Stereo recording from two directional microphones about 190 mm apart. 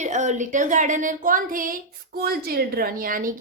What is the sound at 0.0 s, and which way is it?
Speech, 40° right (ahead or behind).